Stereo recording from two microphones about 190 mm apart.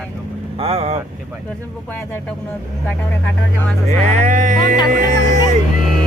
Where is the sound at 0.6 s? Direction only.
35° right (ahead or behind).